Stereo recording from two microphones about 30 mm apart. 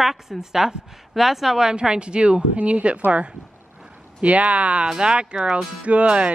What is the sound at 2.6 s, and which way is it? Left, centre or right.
Speech, right.